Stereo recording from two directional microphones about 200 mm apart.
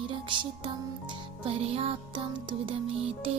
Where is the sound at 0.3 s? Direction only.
25° right (ahead or behind).